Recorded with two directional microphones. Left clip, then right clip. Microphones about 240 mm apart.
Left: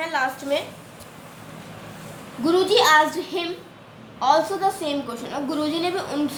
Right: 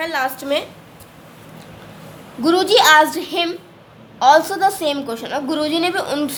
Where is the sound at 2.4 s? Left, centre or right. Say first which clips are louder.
Right 5 dB; right.